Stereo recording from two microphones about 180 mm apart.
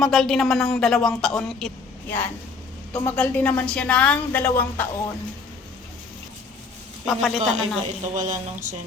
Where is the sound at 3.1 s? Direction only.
10° left (ahead or behind).